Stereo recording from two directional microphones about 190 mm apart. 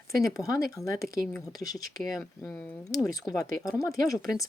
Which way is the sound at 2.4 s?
10° left (ahead or behind).